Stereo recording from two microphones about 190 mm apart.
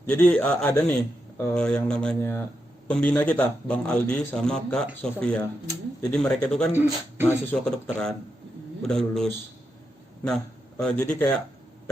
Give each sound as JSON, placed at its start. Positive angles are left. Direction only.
{"t": 0.0, "sound": "a man's voice", "side_deg": 10}
{"t": 0.7, "sound": "a man's voice", "side_deg": 15}
{"t": 1.4, "sound": "speech", "side_deg": 5}
{"t": 6.7, "sound": "speech", "side_deg": -10}
{"t": 7.6, "sound": "speech", "side_deg": 5}
{"t": 10.8, "sound": "speech", "side_deg": 5}